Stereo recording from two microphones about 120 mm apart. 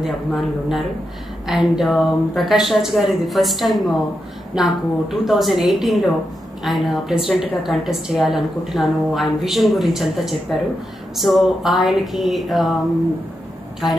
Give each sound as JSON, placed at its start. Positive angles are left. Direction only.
{"t": 0.0, "sound": "a woman's voice", "side_deg": 0}